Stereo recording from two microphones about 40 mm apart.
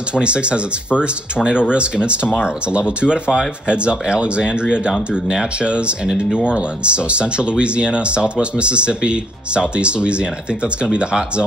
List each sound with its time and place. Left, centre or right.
0.1 s speech: right